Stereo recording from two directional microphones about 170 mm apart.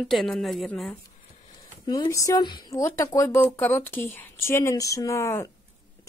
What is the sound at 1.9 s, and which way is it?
A woman's voice, 20° left (ahead or behind).